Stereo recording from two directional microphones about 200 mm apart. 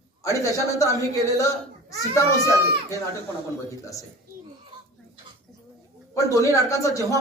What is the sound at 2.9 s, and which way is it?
Speech, 15° right (ahead or behind).